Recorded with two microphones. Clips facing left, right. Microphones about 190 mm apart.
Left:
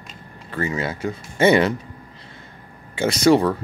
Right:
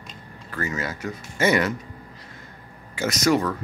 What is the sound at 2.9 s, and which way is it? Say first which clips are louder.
Speech: left 5 dB; 30° left (ahead or behind).